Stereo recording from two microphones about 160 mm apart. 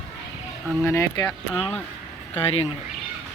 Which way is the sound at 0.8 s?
15° left (ahead or behind).